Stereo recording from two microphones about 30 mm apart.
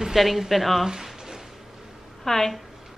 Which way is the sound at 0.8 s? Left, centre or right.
Centre.